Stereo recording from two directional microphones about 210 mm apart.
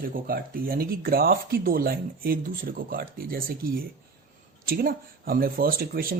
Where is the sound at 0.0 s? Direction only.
45° right (ahead or behind).